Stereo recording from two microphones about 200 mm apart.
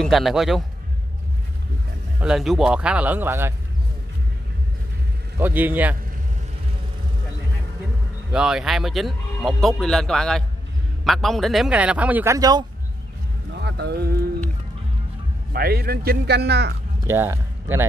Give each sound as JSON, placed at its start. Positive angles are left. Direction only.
{"t": 0.0, "sound": "speech", "side_deg": 0}
{"t": 2.1, "sound": "speech", "side_deg": -5}
{"t": 5.4, "sound": "speech", "side_deg": -10}
{"t": 8.3, "sound": "speech", "side_deg": -5}
{"t": 13.6, "sound": "a sound", "side_deg": -55}
{"t": 15.5, "sound": "speech", "side_deg": -50}
{"t": 17.1, "sound": "speech", "side_deg": -10}